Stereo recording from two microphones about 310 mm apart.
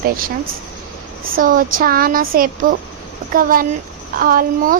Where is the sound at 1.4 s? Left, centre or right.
Right.